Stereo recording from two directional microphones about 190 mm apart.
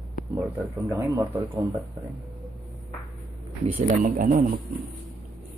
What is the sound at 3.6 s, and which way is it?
Speech, 35° right (ahead or behind).